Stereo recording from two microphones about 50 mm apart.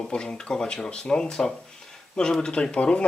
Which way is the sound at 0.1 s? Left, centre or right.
Centre.